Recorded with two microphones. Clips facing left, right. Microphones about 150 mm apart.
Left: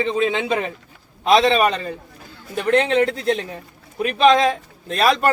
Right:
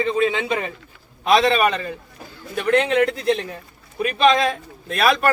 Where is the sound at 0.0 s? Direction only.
25° left (ahead or behind).